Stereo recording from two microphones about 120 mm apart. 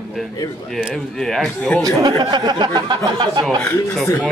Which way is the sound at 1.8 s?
25° right (ahead or behind).